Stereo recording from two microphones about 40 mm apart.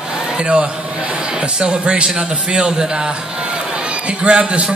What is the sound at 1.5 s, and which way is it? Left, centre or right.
A man's voice, right.